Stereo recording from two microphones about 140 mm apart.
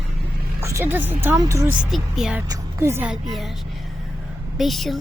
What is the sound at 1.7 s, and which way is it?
Speech, 5° right (ahead or behind).